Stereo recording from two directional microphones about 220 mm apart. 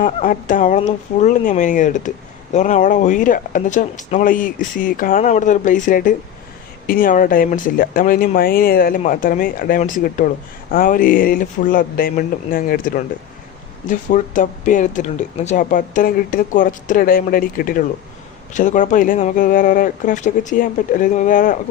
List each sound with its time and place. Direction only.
0.0 s speech: 35° left (ahead or behind)